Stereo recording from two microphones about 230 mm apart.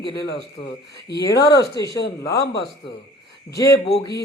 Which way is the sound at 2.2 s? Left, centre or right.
Left.